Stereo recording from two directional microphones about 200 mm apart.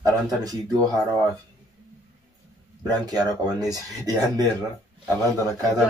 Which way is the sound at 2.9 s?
20° right (ahead or behind).